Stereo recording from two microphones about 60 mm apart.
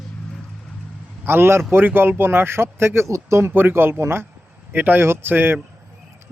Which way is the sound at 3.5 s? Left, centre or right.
Right.